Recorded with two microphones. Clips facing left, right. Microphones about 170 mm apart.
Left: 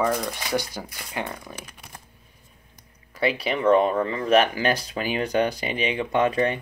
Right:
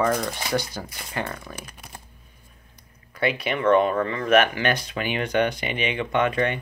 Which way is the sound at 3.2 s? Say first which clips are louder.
Left 1 dB; 35° left (ahead or behind).